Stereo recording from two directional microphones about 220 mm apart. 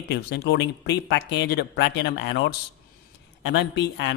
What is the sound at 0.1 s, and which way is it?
A man's voice, 45° left (ahead or behind).